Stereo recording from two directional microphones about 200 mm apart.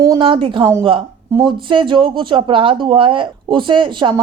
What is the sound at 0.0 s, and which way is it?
A woman's voice, 20° right (ahead or behind).